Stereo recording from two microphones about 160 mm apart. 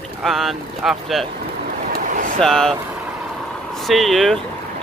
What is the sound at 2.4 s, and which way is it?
Speech, 5° left (ahead or behind).